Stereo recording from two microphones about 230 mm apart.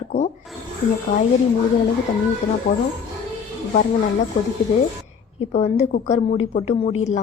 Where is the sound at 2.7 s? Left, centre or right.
Left.